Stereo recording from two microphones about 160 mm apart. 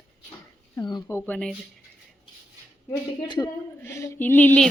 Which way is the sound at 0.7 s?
25° left (ahead or behind).